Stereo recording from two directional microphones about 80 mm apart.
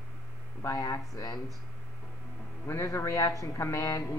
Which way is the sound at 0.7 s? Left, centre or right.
Left.